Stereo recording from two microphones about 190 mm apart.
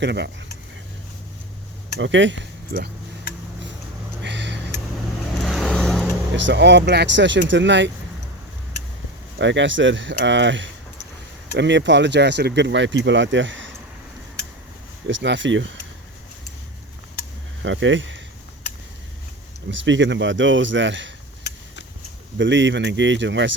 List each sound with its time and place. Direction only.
0.0 s speech: 60° right (ahead or behind)
2.0 s speech: 75° right (ahead or behind)
4.2 s a sound: 65° right (ahead or behind)
5.4 s vehicle: centre (ahead or behind)
6.3 s speech: 70° right (ahead or behind)
9.4 s speech: 70° right (ahead or behind)
15.0 s speech: 70° right (ahead or behind)
17.6 s speech: 75° right (ahead or behind)
19.6 s speech: 75° right (ahead or behind)
22.4 s speech: 70° right (ahead or behind)